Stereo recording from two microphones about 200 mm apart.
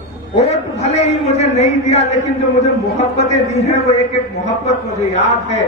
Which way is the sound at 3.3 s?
35° left (ahead or behind).